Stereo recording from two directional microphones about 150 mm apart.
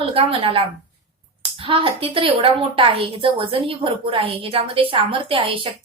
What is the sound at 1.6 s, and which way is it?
A woman's voice, 40° right (ahead or behind).